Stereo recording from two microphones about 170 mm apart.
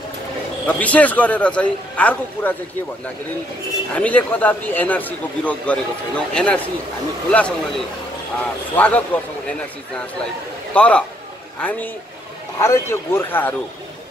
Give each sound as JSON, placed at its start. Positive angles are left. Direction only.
{"t": 0.7, "sound": "a man's voice", "side_deg": 10}
{"t": 3.9, "sound": "a man's voice", "side_deg": 10}
{"t": 10.7, "sound": "a man's voice", "side_deg": 5}